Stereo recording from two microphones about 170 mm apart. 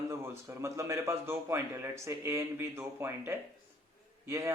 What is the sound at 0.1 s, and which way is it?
A man's voice, 15° right (ahead or behind).